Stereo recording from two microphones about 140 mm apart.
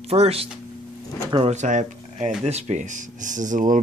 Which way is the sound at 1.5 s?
60° right (ahead or behind).